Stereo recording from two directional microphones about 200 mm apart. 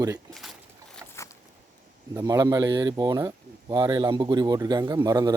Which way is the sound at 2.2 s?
20° right (ahead or behind).